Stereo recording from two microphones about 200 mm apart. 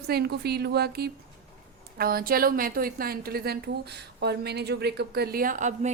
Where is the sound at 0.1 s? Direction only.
50° right (ahead or behind).